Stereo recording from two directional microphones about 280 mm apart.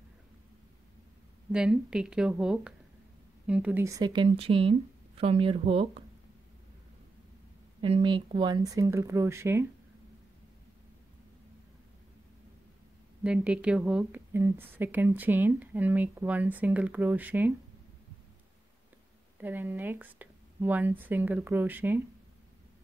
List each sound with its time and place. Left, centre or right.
1.5 s speech: centre
7.8 s speech: centre
13.2 s speech: centre
19.4 s speech: centre